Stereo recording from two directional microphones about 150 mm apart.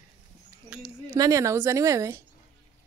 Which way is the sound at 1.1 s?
20° right (ahead or behind).